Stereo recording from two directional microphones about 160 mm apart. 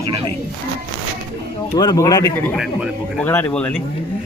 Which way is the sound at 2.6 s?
5° right (ahead or behind).